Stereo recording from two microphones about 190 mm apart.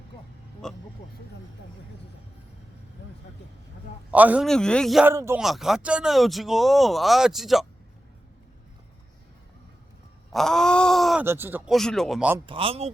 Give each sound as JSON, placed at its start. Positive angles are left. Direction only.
{"t": 0.6, "sound": "vehicle", "side_deg": 5}
{"t": 4.1, "sound": "a man's voice", "side_deg": -10}
{"t": 4.4, "sound": "speech", "side_deg": 5}
{"t": 5.0, "sound": "a man's voice", "side_deg": -15}
{"t": 5.4, "sound": "speech", "side_deg": 0}
{"t": 10.3, "sound": "speech", "side_deg": 5}
{"t": 11.3, "sound": "speech", "side_deg": -10}
{"t": 12.5, "sound": "speech", "side_deg": -30}